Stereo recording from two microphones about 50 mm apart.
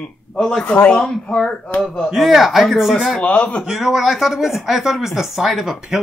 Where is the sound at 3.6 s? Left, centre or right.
Centre.